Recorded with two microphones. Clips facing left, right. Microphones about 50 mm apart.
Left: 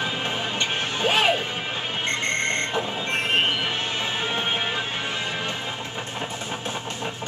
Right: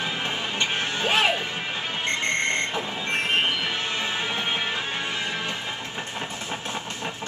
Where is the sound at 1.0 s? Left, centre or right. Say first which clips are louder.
Left 2 dB; centre.